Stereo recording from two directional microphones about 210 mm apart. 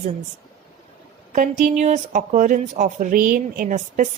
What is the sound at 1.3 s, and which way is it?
Speech, 35° right (ahead or behind).